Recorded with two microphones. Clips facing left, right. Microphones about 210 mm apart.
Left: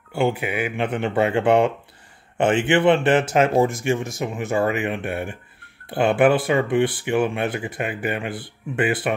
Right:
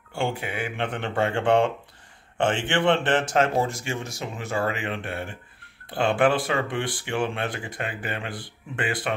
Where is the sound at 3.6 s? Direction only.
20° left (ahead or behind).